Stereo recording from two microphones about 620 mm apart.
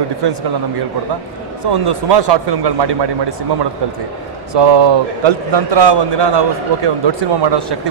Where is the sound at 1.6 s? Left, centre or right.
Right.